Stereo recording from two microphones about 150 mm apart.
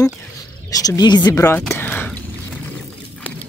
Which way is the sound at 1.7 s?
15° left (ahead or behind).